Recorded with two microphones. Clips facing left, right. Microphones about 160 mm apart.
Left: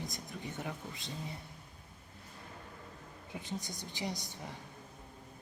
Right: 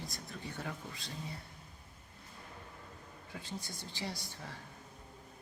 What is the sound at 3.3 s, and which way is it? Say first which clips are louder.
Speech: left 3 dB; 20° left (ahead or behind).